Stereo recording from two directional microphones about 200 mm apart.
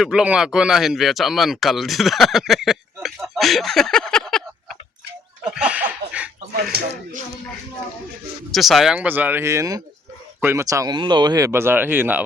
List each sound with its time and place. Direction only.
0.0 s speech: 5° right (ahead or behind)
6.6 s speech: 50° right (ahead or behind)
8.5 s speech: centre (ahead or behind)